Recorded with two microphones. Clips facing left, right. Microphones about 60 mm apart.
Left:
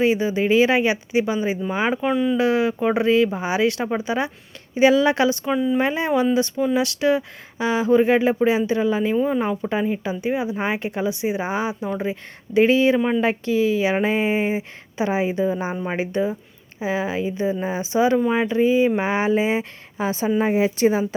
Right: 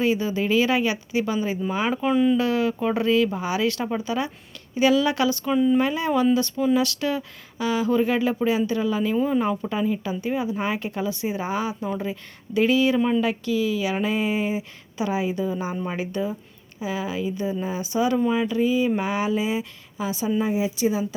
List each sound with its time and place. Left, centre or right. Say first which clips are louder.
0.0 s speech: left 3 dB; left
2.0 s speech: right 1 dB; centre
2.4 s speech: left 3 dB; left
5.5 s speech: right 1 dB; centre
5.8 s speech: left 1 dB; left
9.2 s speech: left 1 dB; centre
9.6 s speech: left 2 dB; left
13.4 s speech: left 4 dB; left
20.4 s a woman's voice: left 6 dB; left